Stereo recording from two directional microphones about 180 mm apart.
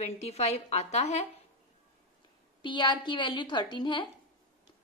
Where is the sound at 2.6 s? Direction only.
25° left (ahead or behind).